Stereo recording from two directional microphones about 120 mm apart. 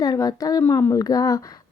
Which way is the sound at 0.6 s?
20° left (ahead or behind).